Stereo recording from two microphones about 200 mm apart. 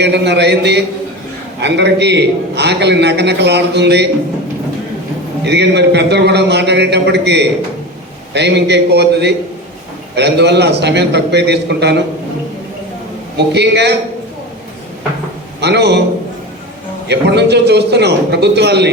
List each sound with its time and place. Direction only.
0.0 s a man's voice: 60° right (ahead or behind)
5.5 s a man's voice: 55° right (ahead or behind)
13.3 s a man's voice: 60° right (ahead or behind)
15.6 s a man's voice: 55° right (ahead or behind)
17.1 s a man's voice: 55° right (ahead or behind)